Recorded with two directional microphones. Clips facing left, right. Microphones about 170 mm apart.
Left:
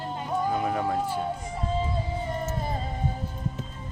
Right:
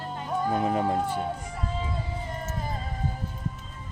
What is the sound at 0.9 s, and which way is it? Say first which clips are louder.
Speech: even; 5° left (ahead or behind).